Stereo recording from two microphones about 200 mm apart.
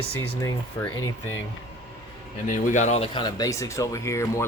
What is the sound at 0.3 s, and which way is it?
Speech, 15° left (ahead or behind).